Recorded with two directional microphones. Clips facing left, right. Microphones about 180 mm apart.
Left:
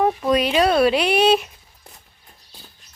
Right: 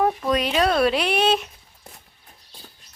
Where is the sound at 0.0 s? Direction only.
5° left (ahead or behind).